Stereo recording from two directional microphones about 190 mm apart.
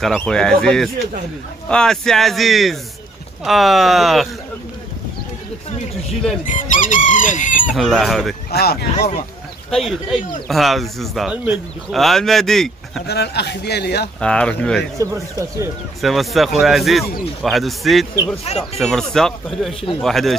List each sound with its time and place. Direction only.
0.0 s speech: 5° left (ahead or behind)
6.4 s chicken: 45° left (ahead or behind)
7.7 s speech: centre (ahead or behind)
8.5 s speech: 55° left (ahead or behind)
9.7 s speech: centre (ahead or behind)
13.0 s a man's voice: 60° left (ahead or behind)
14.2 s speech: 5° left (ahead or behind)
15.0 s speech: 15° right (ahead or behind)
16.0 s speech: centre (ahead or behind)
18.4 s speech: 35° left (ahead or behind)
18.8 s speech: centre (ahead or behind)